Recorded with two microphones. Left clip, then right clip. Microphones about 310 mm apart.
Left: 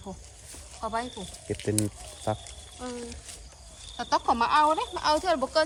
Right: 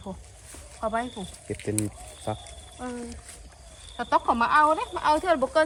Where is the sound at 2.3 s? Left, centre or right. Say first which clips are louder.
Left 2 dB; left.